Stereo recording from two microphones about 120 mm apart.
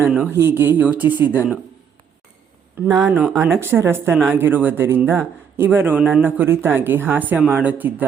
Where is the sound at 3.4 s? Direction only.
20° right (ahead or behind).